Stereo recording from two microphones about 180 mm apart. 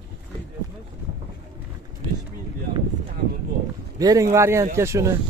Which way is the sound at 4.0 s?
20° right (ahead or behind).